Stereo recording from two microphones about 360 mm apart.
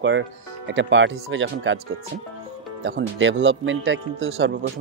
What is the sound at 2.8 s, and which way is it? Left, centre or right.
A man's voice, right.